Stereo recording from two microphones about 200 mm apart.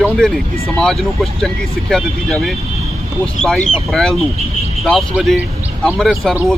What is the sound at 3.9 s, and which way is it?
Speech, centre (ahead or behind).